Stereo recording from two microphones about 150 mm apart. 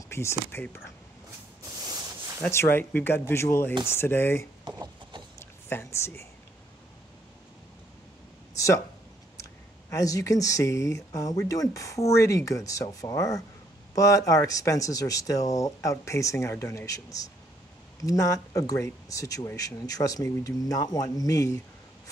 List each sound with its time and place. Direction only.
0.1 s speech: 20° left (ahead or behind)
2.5 s speech: 15° left (ahead or behind)
4.6 s a sound: 30° right (ahead or behind)
5.4 s speech: 15° left (ahead or behind)
8.5 s a sound: 20° left (ahead or behind)
9.4 s speech: 20° left (ahead or behind)